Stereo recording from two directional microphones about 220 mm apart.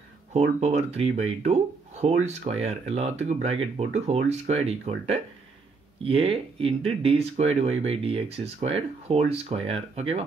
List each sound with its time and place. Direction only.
0.3 s speech: 30° right (ahead or behind)